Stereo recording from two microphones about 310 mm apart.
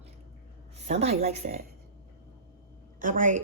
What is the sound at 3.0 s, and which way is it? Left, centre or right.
Speech, right.